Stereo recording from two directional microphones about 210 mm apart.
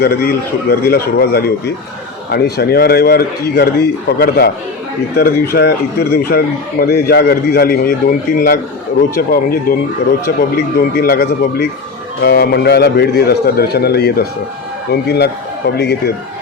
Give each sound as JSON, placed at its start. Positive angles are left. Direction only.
{"t": 0.0, "sound": "a man's voice", "side_deg": 50}
{"t": 10.8, "sound": "a man's voice", "side_deg": 45}